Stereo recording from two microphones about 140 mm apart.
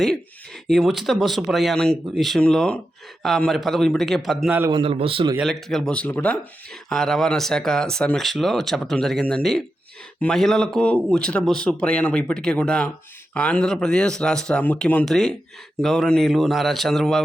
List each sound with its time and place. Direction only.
0.7 s speech: centre (ahead or behind)
4.7 s a man's voice: 40° right (ahead or behind)
5.4 s speech: centre (ahead or behind)